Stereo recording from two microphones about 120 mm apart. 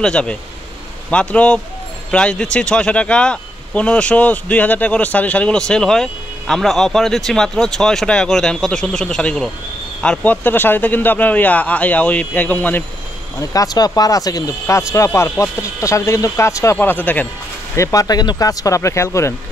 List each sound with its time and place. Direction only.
0.0 s speech: 10° left (ahead or behind)
13.4 s speech: 30° left (ahead or behind)
17.7 s speech: 30° left (ahead or behind)